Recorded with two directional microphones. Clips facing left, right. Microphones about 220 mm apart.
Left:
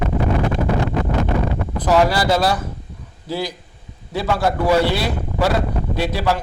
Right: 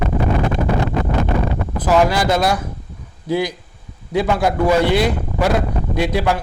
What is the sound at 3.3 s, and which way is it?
Speech, 15° right (ahead or behind).